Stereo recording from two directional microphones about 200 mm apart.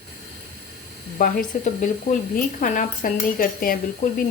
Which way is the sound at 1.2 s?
45° left (ahead or behind).